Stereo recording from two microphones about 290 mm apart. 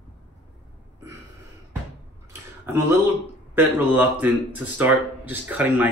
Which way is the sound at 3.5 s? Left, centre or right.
Centre.